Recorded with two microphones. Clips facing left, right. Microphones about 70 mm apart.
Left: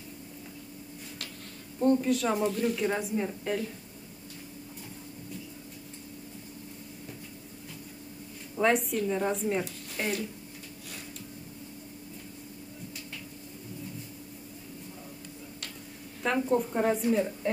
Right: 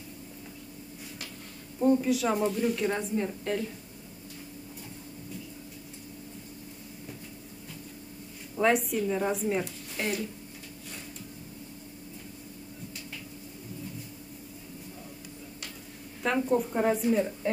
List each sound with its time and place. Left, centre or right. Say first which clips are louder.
1.8 s a woman's voice: right 1 dB; centre
8.5 s a woman's voice: right 1 dB; centre
16.2 s a woman's voice: even; centre